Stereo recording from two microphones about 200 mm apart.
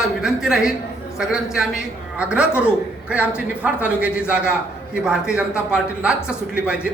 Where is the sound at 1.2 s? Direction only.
5° right (ahead or behind).